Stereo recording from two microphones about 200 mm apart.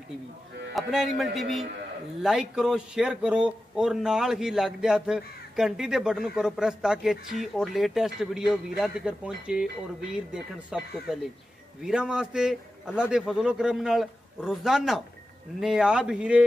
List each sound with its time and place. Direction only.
0.7 s speech: centre (ahead or behind)